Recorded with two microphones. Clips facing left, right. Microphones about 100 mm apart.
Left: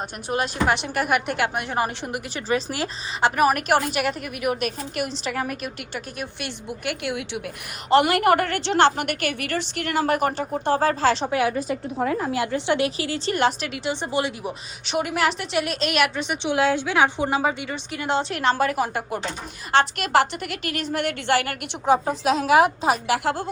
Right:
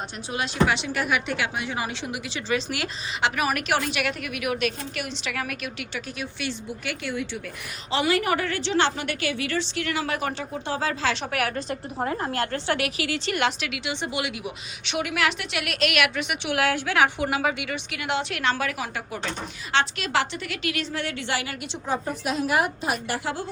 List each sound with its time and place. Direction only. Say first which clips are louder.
0.3 s a woman's voice: left 2 dB; 45° left (ahead or behind)
5.9 s a woman's voice: left 1 dB; 50° left (ahead or behind)
11.3 s a woman's voice: left 5 dB; 20° left (ahead or behind)
11.5 s a woman's voice: left 4 dB; centre (ahead or behind); by 21.9 s 60° left (ahead or behind)
22.0 s a woman's voice: left 5 dB; 90° left